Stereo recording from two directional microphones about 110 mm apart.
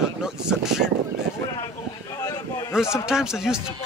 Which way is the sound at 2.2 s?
30° left (ahead or behind).